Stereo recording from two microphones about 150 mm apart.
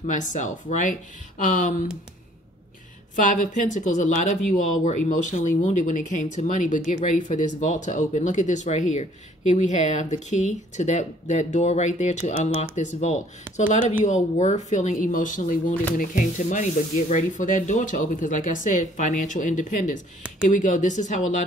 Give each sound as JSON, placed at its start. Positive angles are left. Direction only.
{"t": 0.0, "sound": "sanding", "side_deg": 55}
{"t": 3.2, "sound": "sanding", "side_deg": 60}
{"t": 6.9, "sound": "speech", "side_deg": 55}
{"t": 14.0, "sound": "sanding", "side_deg": 50}